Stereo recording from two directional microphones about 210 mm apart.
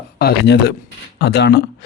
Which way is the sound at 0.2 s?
50° left (ahead or behind).